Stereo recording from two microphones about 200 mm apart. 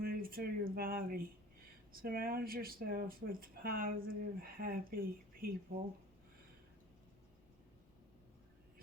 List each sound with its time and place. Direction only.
0.0 s speech: 45° right (ahead or behind)